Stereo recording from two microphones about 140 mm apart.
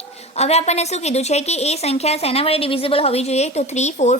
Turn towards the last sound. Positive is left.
turn(degrees=55)  # may be behind; listen again after turning